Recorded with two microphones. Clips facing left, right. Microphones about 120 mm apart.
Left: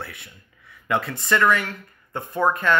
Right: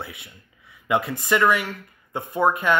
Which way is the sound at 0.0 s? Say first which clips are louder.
Even; 10° right (ahead or behind).